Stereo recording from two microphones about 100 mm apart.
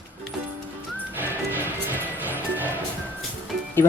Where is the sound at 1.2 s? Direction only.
20° right (ahead or behind).